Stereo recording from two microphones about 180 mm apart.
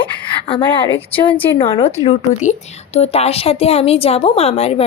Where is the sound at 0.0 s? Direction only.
30° left (ahead or behind).